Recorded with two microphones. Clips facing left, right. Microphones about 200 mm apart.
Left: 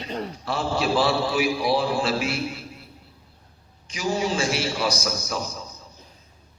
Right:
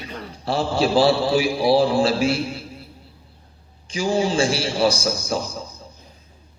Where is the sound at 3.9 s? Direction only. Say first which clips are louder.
Right 4 dB; 30° right (ahead or behind).